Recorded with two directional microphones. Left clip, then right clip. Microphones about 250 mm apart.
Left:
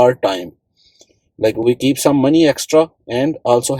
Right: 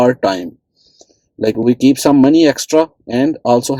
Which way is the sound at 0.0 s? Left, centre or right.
Right.